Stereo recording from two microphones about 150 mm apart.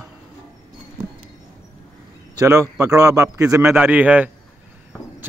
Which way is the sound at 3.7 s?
10° right (ahead or behind).